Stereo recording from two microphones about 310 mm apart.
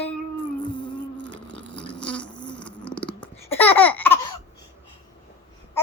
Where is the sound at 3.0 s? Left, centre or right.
Centre.